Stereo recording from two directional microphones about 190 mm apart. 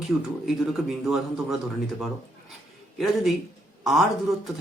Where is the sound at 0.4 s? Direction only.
Centre (ahead or behind).